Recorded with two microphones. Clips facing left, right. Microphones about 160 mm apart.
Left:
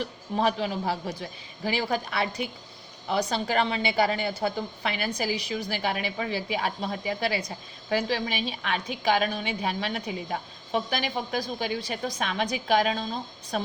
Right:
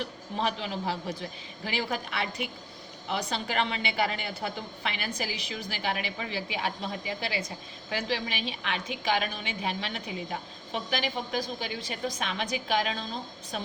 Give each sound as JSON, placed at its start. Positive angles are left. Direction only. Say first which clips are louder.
{"t": 0.3, "sound": "a woman's voice", "louder": "left 5 dB", "side_deg": 45}